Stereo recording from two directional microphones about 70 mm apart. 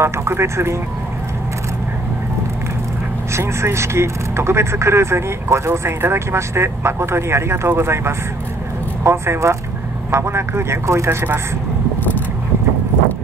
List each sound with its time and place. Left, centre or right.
0.0 s speech: right
3.3 s speech: right